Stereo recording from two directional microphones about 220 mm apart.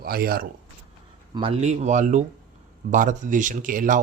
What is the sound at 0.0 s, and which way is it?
Speech, 45° right (ahead or behind).